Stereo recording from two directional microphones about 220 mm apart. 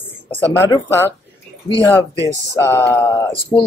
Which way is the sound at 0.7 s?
10° left (ahead or behind).